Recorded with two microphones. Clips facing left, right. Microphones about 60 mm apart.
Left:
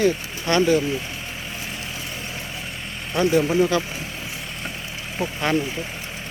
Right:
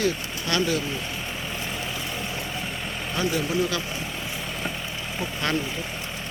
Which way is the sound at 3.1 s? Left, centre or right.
Left.